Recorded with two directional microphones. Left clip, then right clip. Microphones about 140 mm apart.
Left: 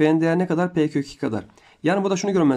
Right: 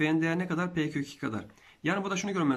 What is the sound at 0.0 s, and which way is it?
Speech, 40° left (ahead or behind).